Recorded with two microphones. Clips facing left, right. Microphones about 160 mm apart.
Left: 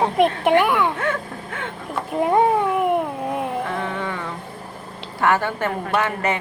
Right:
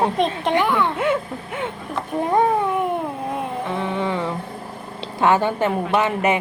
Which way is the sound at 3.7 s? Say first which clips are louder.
Right 3 dB; 15° right (ahead or behind).